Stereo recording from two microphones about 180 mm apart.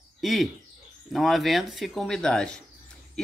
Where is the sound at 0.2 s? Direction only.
Centre (ahead or behind).